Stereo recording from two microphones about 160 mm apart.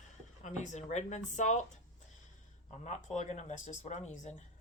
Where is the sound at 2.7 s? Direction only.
45° left (ahead or behind).